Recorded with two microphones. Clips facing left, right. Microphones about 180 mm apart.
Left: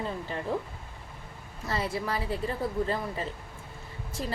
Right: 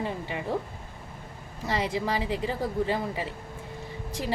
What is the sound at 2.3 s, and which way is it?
Speech, 90° right.